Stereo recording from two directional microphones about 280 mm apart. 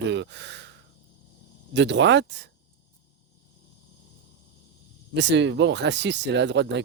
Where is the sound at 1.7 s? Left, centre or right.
Right.